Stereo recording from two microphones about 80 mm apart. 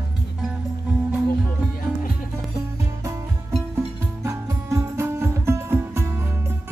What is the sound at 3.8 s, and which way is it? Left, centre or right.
Music, right.